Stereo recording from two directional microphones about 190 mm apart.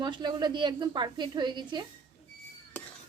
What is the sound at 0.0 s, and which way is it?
A woman's voice, 25° right (ahead or behind).